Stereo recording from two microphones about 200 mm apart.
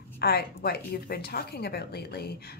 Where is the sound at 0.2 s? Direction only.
50° left (ahead or behind).